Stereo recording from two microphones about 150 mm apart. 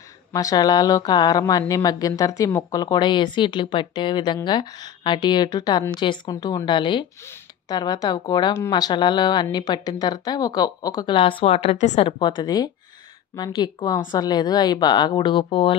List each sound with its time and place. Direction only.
0.3 s a woman's voice: 25° left (ahead or behind)